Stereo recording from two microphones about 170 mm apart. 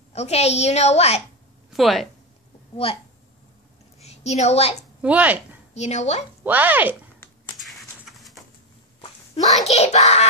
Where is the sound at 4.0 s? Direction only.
40° left (ahead or behind).